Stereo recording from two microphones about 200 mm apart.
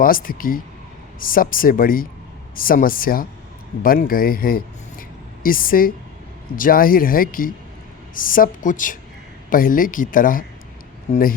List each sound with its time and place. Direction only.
0.0 s speech: 45° left (ahead or behind)